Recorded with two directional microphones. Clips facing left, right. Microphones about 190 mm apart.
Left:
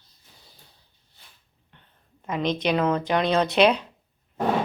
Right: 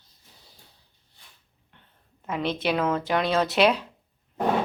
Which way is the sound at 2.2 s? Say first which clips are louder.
Left 2 dB; 5° right (ahead or behind).